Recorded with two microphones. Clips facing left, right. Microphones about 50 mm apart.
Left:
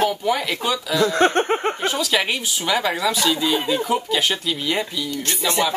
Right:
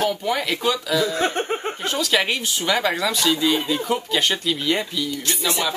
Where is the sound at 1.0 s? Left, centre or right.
Left.